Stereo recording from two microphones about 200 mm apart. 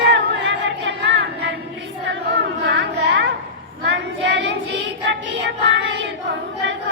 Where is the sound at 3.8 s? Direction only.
65° right (ahead or behind).